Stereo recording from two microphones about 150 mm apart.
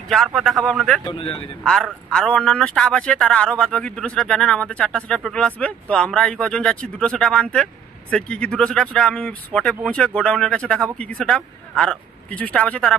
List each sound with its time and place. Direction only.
0.1 s a man's voice: centre (ahead or behind)
1.0 s speech: 35° left (ahead or behind)
1.6 s a man's voice: 5° left (ahead or behind)